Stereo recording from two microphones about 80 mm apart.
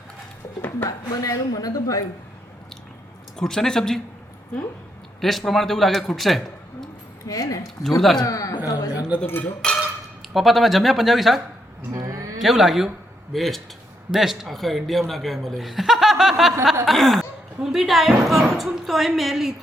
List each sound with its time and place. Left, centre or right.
0.9 s speech: left
3.3 s speech: centre
5.2 s speech: centre
7.3 s speech: left
9.1 s speech: centre
10.3 s speech: centre
11.9 s a sound: right
12.4 s speech: centre